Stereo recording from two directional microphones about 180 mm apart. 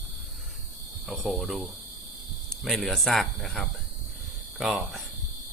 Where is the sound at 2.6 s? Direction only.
Centre (ahead or behind).